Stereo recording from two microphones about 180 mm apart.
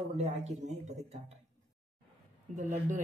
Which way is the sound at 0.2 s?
35° right (ahead or behind).